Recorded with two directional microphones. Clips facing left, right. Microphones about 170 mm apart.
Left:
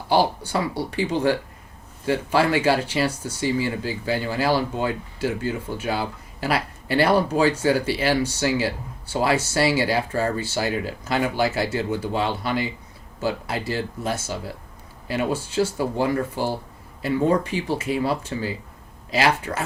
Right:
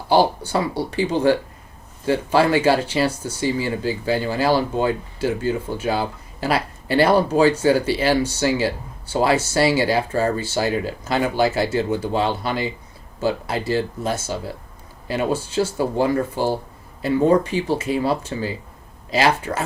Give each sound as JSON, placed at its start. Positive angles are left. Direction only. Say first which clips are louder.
{"t": 0.1, "sound": "speech", "louder": "right 3 dB", "side_deg": -30}